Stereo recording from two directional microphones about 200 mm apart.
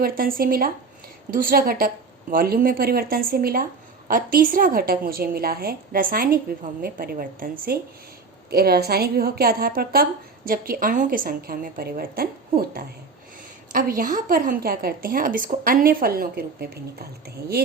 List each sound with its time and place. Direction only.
0.0 s a woman's voice: 45° right (ahead or behind)